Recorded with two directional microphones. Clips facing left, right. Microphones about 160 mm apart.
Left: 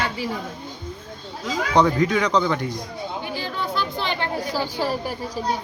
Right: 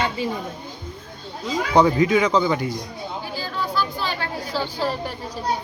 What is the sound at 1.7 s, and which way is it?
Speech, 5° right (ahead or behind).